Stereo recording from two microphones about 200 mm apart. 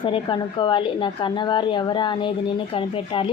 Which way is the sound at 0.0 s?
25° left (ahead or behind).